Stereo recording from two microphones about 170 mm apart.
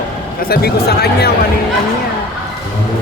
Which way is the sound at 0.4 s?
65° left (ahead or behind).